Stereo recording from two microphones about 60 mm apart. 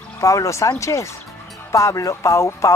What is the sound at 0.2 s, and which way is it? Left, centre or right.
Speech, left.